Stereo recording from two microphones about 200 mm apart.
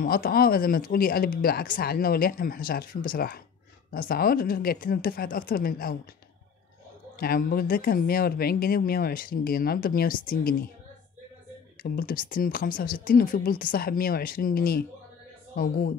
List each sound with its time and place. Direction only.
0.0 s speech: 45° left (ahead or behind)
7.2 s speech: 45° left (ahead or behind)
11.8 s speech: 45° left (ahead or behind)